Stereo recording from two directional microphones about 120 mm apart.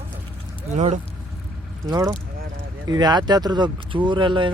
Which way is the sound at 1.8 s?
40° right (ahead or behind).